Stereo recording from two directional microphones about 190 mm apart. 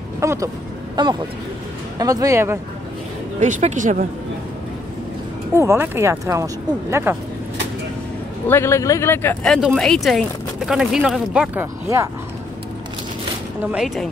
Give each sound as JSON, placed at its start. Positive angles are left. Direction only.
{"t": 0.2, "sound": "speech", "side_deg": -15}
{"t": 3.3, "sound": "speech", "side_deg": -40}
{"t": 5.5, "sound": "speech", "side_deg": -15}
{"t": 8.5, "sound": "speech", "side_deg": 15}
{"t": 11.6, "sound": "speech", "side_deg": -15}
{"t": 13.7, "sound": "speech", "side_deg": -5}